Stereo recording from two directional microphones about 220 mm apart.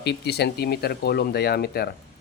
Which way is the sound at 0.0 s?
50° left (ahead or behind).